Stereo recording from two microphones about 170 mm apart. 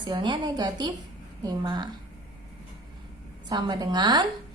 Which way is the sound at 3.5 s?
25° right (ahead or behind).